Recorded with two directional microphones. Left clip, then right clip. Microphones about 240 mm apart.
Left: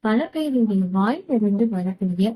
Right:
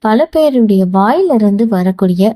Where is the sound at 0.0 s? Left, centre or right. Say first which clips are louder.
Right 13 dB; right.